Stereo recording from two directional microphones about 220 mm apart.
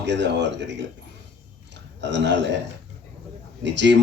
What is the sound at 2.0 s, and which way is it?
Speech, 55° right (ahead or behind).